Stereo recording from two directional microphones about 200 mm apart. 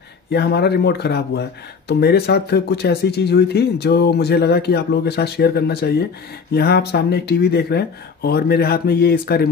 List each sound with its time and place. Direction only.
0.3 s speech: 55° left (ahead or behind)